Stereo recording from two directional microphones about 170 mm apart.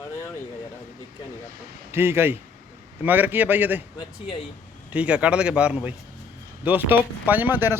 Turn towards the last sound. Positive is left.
turn(degrees=-10)  # may be behind; listen again after turning